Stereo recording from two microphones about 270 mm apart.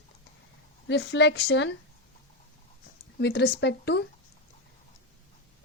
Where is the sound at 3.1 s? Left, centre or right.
Left.